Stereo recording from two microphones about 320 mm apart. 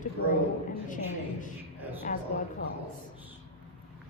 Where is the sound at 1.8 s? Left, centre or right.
Centre.